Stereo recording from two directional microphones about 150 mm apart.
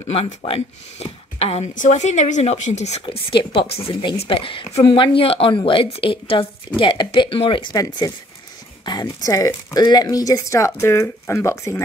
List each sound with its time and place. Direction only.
0.1 s a woman's voice: 40° left (ahead or behind); by 11.8 s 20° left (ahead or behind)